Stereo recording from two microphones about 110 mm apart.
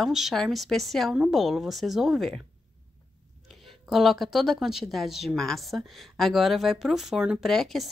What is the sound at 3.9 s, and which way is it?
Speech, centre (ahead or behind).